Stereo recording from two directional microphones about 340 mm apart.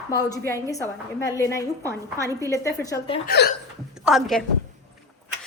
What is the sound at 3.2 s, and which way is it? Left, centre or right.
Speech, left.